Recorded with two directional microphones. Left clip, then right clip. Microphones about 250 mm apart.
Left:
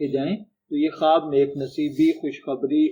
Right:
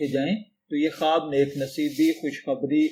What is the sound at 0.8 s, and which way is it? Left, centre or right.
Speech, right.